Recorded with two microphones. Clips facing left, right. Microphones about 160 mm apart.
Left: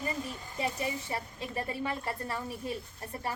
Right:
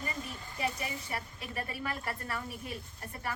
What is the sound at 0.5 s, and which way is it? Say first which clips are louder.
A woman's voice: left 3 dB; 25° left (ahead or behind).